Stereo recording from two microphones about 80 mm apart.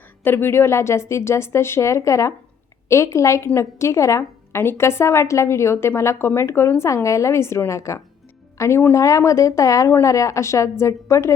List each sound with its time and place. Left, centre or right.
0.3 s a woman's voice: left